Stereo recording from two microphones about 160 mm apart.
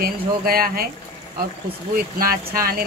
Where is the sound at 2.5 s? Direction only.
70° right (ahead or behind).